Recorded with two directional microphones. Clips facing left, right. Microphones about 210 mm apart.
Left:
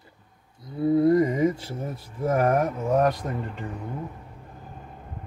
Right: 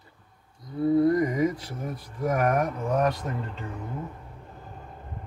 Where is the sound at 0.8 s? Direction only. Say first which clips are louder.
Left 2 dB; 25° left (ahead or behind).